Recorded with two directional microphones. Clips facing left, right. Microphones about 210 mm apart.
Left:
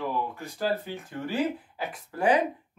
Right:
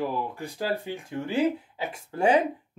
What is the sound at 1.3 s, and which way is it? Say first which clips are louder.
Speech: right 4 dB; 25° right (ahead or behind).